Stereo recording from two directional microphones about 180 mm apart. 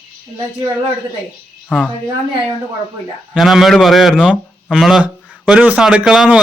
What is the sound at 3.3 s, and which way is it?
A man's voice, centre (ahead or behind).